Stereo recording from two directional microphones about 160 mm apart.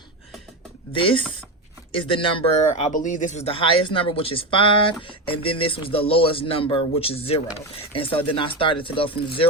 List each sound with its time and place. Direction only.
0.9 s speech: 30° left (ahead or behind)